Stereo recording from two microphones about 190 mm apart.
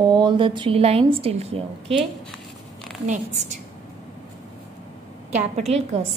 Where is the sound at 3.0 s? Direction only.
40° right (ahead or behind).